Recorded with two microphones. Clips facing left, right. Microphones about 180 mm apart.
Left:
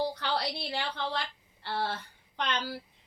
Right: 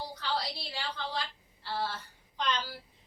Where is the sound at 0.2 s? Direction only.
65° left (ahead or behind).